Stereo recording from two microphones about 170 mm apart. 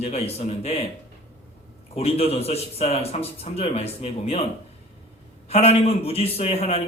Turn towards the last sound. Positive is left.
turn(degrees=35)  # may be behind; listen again after turning